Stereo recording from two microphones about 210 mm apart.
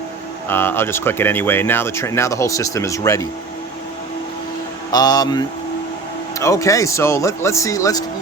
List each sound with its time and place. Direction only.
0.4 s speech: 10° left (ahead or behind)
4.9 s speech: 20° left (ahead or behind)